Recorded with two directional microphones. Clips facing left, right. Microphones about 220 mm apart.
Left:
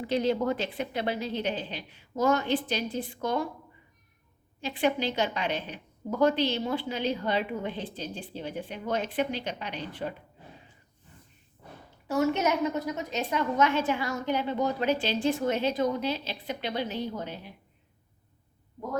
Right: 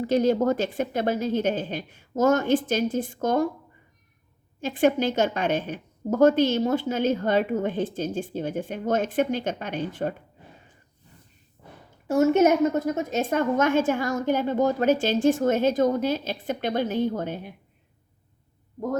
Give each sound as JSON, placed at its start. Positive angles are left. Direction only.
{"t": 0.0, "sound": "a woman's voice", "side_deg": -45}
{"t": 4.6, "sound": "a woman's voice", "side_deg": -45}
{"t": 12.0, "sound": "a woman's voice", "side_deg": -50}